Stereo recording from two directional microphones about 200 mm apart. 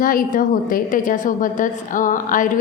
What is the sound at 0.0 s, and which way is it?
A woman's voice, 45° left (ahead or behind).